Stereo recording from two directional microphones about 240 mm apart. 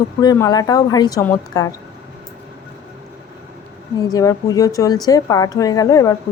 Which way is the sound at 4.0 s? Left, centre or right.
Centre.